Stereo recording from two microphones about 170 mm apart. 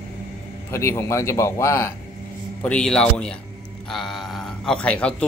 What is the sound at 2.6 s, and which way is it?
Speech, 5° left (ahead or behind).